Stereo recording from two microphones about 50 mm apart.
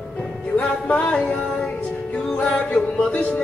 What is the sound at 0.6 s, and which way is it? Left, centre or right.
Music, left.